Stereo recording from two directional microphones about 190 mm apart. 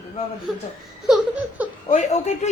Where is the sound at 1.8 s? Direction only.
40° left (ahead or behind).